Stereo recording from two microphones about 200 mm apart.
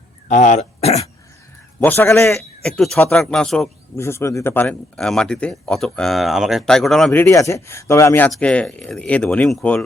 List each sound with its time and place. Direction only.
0.3 s throat clearing: 35° left (ahead or behind)
1.8 s a man's voice: 10° left (ahead or behind)
3.9 s speech: 15° left (ahead or behind)